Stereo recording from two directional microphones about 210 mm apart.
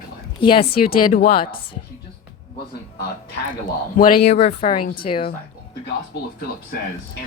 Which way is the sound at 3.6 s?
40° left (ahead or behind).